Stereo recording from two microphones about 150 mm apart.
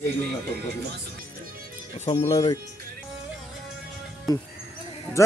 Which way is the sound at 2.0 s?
40° left (ahead or behind).